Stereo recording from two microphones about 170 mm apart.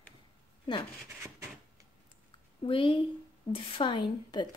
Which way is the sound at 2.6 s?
30° left (ahead or behind).